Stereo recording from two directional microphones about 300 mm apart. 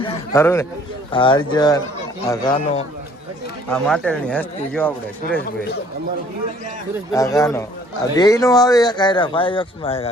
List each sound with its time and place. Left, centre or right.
0.0 s speech: centre
3.7 s speech: centre
7.1 s speech: centre